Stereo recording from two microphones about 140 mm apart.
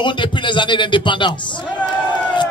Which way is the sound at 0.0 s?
35° left (ahead or behind).